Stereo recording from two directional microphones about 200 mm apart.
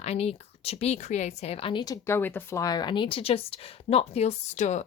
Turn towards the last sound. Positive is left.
turn(degrees=35)  # may be behind; listen again after turning